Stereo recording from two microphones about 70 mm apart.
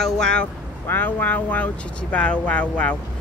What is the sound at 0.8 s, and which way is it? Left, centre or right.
Speech, left.